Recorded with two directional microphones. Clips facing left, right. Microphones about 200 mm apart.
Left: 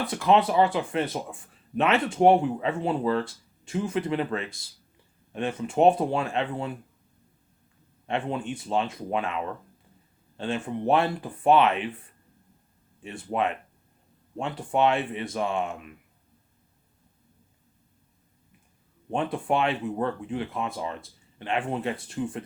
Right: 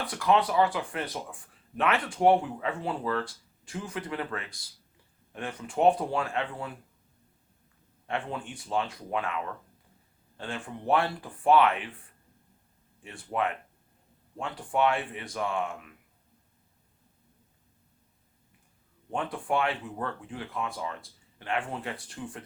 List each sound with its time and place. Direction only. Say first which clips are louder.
0.0 s speech: left 4 dB; 25° left (ahead or behind)
8.0 s speech: left 5 dB; 20° left (ahead or behind)
13.0 s speech: left 3 dB; 20° left (ahead or behind)
19.1 s speech: left 4 dB; 25° left (ahead or behind)